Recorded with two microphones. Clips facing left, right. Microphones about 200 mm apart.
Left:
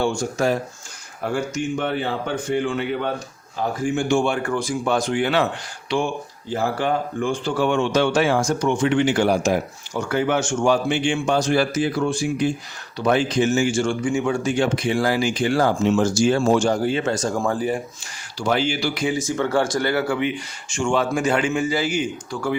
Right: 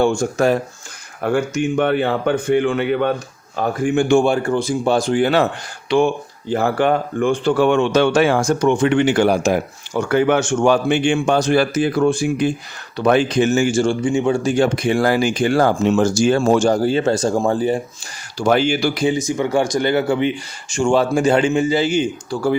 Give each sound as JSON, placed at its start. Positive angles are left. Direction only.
{"t": 0.0, "sound": "speech", "side_deg": -50}
{"t": 4.4, "sound": "speech", "side_deg": -25}
{"t": 5.9, "sound": "speech", "side_deg": -60}
{"t": 14.0, "sound": "speech", "side_deg": -25}
{"t": 14.5, "sound": "speech", "side_deg": -45}
{"t": 18.3, "sound": "speech", "side_deg": -50}
{"t": 18.9, "sound": "speech", "side_deg": -25}